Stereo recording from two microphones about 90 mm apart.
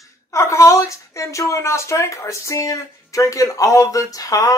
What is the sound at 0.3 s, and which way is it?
Speech, 35° left (ahead or behind).